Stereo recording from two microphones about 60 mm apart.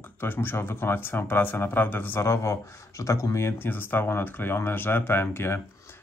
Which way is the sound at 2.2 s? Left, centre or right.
Left.